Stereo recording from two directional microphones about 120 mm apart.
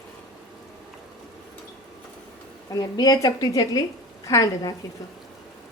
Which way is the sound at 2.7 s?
35° left (ahead or behind).